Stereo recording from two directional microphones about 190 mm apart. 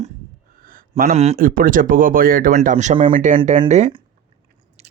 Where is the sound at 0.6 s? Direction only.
45° right (ahead or behind).